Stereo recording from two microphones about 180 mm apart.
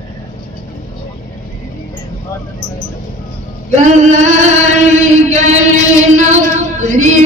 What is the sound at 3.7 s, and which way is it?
Singing, 40° right (ahead or behind).